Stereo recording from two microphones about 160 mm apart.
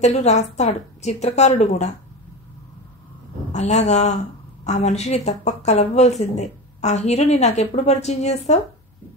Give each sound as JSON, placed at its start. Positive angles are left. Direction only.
{"t": 0.0, "sound": "speech", "side_deg": 45}
{"t": 3.5, "sound": "speech", "side_deg": 45}